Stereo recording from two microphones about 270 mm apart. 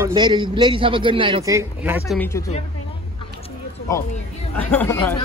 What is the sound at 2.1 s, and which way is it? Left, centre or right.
Speech, centre.